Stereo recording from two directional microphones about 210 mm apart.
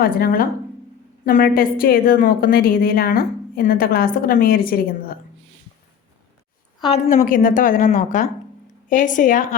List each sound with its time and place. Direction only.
0.0 s a woman's voice: 45° left (ahead or behind)
6.8 s a woman's voice: 30° left (ahead or behind)